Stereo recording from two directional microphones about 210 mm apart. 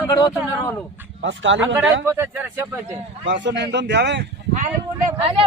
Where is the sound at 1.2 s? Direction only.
60° right (ahead or behind).